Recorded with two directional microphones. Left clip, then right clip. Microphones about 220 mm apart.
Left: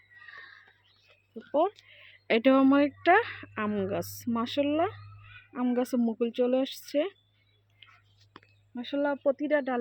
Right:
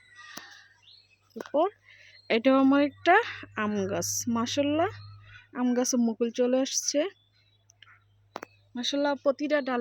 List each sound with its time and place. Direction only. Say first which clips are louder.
1.3 s a sound: right 1 dB; 5° right (ahead or behind)
2.2 s speech: even; 5° left (ahead or behind)
8.7 s speech: right 2 dB; 10° right (ahead or behind)